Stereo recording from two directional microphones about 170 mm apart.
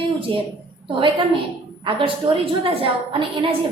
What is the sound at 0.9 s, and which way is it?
A woman's voice, 30° right (ahead or behind).